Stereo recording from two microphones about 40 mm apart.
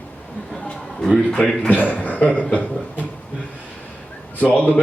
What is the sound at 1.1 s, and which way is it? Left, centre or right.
Speech, left.